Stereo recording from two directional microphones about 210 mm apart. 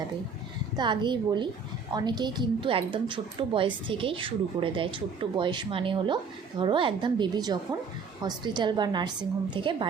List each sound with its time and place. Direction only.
0.8 s a woman's voice: 20° right (ahead or behind)